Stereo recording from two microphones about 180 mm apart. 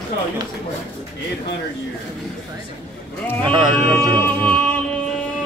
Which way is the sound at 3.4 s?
25° right (ahead or behind).